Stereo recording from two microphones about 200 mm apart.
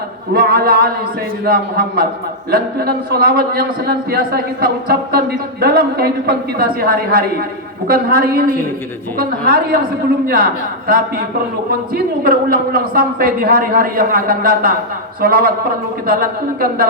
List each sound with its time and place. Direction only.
0.3 s a man's voice: 50° right (ahead or behind)
16.6 s a man's voice: 50° right (ahead or behind)